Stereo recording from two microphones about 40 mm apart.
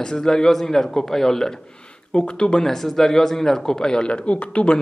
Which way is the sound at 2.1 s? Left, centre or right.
Left.